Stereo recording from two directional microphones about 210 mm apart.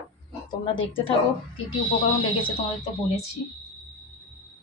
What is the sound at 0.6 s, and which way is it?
A woman's voice, 25° left (ahead or behind).